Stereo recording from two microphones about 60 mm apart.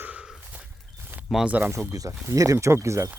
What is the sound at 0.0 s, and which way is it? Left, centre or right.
Horse, right.